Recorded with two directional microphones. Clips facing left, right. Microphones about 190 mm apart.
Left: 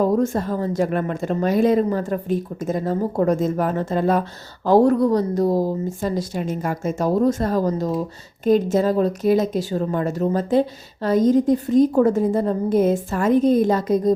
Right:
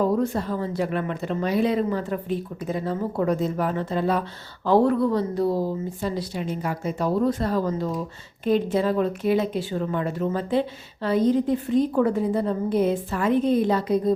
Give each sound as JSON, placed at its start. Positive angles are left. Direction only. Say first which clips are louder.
{"t": 0.0, "sound": "a woman's voice", "louder": "left 3 dB", "side_deg": 45}